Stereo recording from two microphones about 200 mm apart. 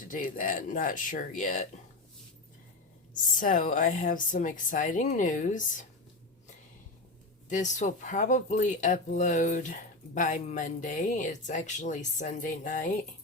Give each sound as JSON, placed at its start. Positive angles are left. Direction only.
{"t": 0.0, "sound": "speech", "side_deg": 45}
{"t": 3.3, "sound": "speech", "side_deg": 45}
{"t": 7.5, "sound": "speech", "side_deg": 40}